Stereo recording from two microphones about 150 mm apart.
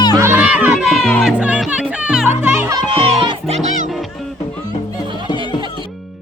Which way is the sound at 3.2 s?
40° right (ahead or behind).